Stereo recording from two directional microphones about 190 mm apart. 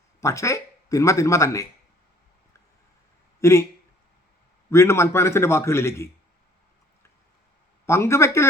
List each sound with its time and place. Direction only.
0.2 s speech: 15° left (ahead or behind)
3.4 s a man's voice: 15° left (ahead or behind)
4.7 s a man's voice: 15° left (ahead or behind)
7.9 s a man's voice: 15° left (ahead or behind)